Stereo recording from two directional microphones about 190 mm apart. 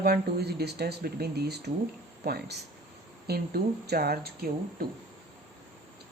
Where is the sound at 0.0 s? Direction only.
55° right (ahead or behind).